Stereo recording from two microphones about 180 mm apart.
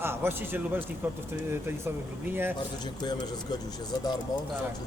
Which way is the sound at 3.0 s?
25° left (ahead or behind).